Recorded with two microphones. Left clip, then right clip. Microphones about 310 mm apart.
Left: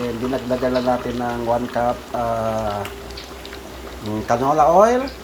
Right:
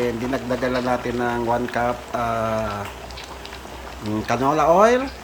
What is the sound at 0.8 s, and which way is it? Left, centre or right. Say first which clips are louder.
Speech: left 1 dB; centre.